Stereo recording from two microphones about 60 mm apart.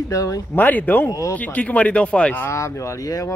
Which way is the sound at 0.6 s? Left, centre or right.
Left.